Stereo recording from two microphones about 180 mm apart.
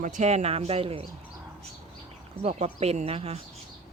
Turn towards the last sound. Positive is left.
turn(degrees=-35)  # may be behind; listen again after turning